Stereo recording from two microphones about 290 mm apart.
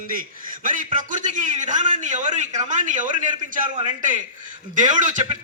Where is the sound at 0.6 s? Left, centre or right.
Right.